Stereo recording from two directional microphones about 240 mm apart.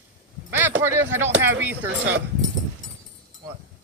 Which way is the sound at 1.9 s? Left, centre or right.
Right.